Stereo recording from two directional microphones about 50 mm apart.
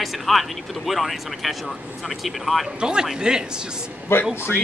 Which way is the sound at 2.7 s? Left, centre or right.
Centre.